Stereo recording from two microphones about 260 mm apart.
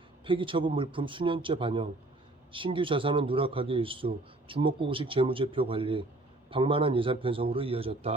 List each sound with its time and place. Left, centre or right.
0.3 s a man's voice: centre